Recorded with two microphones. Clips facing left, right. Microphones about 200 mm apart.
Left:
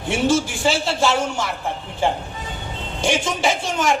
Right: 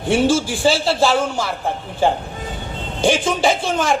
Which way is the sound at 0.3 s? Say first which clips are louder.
Right 2 dB; 30° right (ahead or behind).